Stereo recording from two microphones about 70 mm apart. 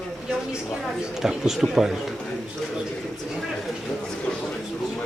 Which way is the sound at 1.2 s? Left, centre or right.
Centre.